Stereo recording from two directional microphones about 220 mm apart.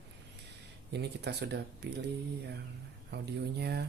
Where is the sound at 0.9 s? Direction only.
50° right (ahead or behind).